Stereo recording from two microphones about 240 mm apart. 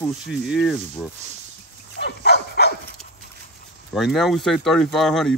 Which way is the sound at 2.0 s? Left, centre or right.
Left.